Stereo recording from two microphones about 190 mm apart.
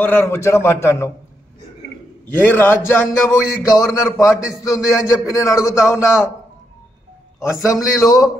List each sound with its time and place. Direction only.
0.0 s speech: 10° left (ahead or behind)
2.3 s speech: 10° left (ahead or behind)
7.6 s speech: 20° left (ahead or behind)